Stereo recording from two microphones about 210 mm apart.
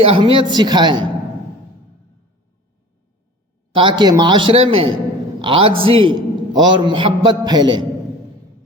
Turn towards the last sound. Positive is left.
turn(degrees=-20)  # may be behind; listen again after turning